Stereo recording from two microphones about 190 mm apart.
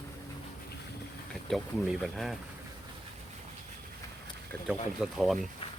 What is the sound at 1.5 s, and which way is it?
Speech, centre (ahead or behind).